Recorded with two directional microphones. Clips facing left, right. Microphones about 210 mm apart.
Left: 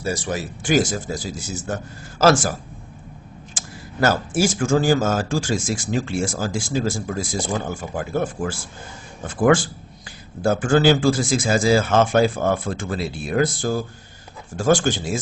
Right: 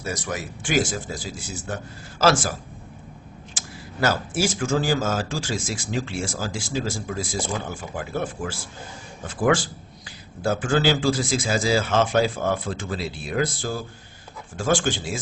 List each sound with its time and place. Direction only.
0.0 s speech: 30° left (ahead or behind); by 2.5 s 45° left (ahead or behind)
3.5 s speech: 45° left (ahead or behind)